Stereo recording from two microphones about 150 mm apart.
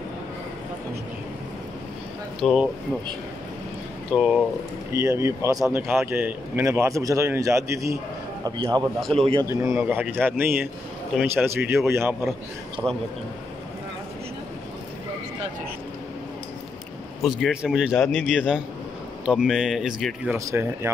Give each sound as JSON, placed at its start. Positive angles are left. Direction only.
{"t": 2.4, "sound": "speech", "side_deg": -5}
{"t": 4.1, "sound": "speech", "side_deg": -5}
{"t": 4.9, "sound": "a man's voice", "side_deg": -20}
{"t": 9.2, "sound": "a man's voice", "side_deg": -35}
{"t": 9.5, "sound": "a man's voice", "side_deg": -15}
{"t": 17.2, "sound": "speech", "side_deg": 0}
{"t": 17.9, "sound": "speech", "side_deg": 10}
{"t": 18.2, "sound": "speech", "side_deg": -5}
{"t": 20.2, "sound": "a man's voice", "side_deg": -15}